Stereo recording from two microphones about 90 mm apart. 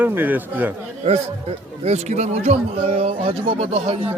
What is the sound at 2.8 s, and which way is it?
Speech, 90° right.